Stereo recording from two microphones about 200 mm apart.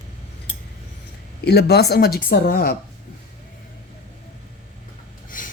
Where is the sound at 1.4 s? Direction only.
55° left (ahead or behind).